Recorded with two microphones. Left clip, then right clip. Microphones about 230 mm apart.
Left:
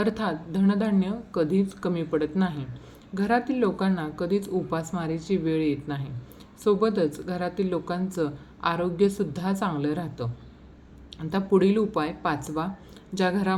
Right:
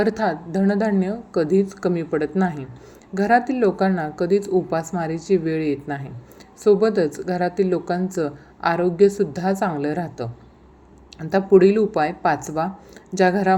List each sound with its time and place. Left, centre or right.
0.0 s a woman's voice: centre